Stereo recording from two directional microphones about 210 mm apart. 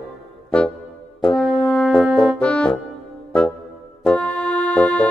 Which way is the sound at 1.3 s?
Centre (ahead or behind).